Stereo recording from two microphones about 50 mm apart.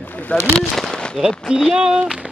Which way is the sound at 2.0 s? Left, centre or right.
Centre.